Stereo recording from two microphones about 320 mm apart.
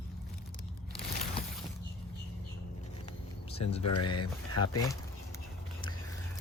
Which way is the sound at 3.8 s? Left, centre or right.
Left.